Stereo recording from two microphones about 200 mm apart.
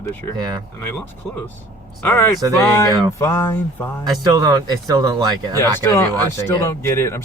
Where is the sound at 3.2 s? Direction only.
10° left (ahead or behind).